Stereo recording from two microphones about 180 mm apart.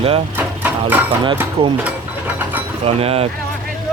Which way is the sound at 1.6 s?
30° right (ahead or behind).